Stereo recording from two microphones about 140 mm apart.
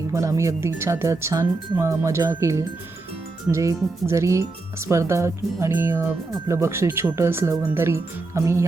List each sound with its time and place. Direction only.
0.1 s speech: 20° right (ahead or behind)